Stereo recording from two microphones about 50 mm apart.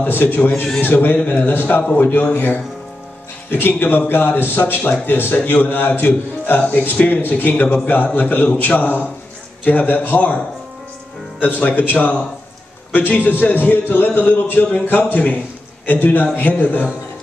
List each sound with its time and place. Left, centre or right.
0.0 s a man's voice: left
11.4 s a man's voice: left